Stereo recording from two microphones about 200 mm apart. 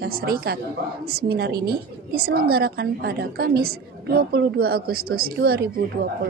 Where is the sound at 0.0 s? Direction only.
50° right (ahead or behind).